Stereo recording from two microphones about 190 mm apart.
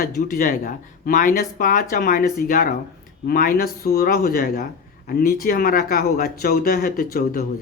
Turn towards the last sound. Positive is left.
turn(degrees=55)  # may be behind; listen again after turning